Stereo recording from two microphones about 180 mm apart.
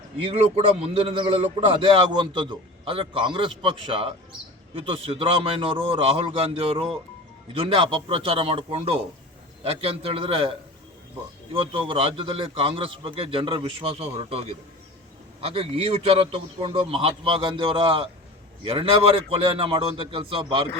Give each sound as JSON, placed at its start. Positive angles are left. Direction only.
{"t": 0.3, "sound": "a man's voice", "side_deg": -35}